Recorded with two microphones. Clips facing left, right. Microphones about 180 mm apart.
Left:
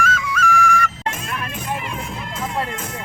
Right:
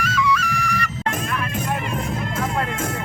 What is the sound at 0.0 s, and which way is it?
Flute, 50° left (ahead or behind).